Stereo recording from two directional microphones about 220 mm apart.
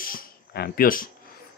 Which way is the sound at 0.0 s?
40° left (ahead or behind).